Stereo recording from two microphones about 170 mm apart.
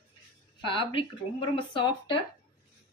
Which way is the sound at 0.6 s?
30° left (ahead or behind).